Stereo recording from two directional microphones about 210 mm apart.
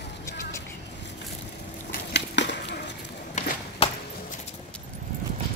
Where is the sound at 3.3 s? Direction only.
35° left (ahead or behind).